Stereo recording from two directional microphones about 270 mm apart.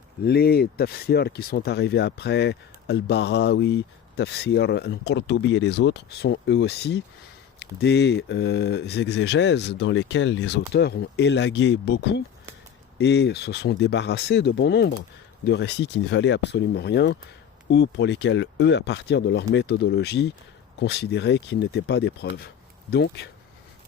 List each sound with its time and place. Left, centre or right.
0.3 s speech: left